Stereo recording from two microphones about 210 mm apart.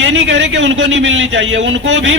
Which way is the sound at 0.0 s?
65° right (ahead or behind).